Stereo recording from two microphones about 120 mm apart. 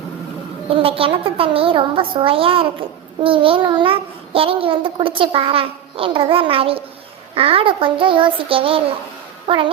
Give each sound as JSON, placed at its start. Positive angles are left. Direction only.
{"t": 0.7, "sound": "a child's voice", "side_deg": -50}